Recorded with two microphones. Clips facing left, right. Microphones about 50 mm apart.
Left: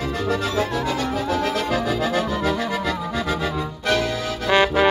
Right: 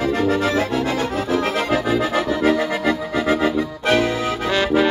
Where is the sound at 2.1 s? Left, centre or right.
Right.